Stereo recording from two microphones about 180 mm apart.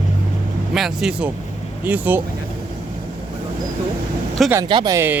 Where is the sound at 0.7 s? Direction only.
5° right (ahead or behind).